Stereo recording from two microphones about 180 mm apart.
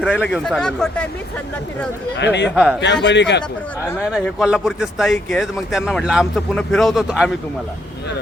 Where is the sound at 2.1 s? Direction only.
75° left (ahead or behind).